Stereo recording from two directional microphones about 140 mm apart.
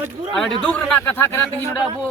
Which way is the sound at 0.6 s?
10° left (ahead or behind).